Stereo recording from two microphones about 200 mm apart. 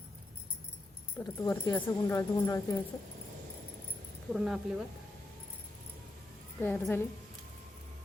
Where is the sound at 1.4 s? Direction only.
15° left (ahead or behind).